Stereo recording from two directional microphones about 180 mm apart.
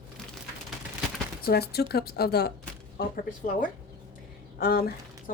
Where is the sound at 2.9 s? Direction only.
50° left (ahead or behind).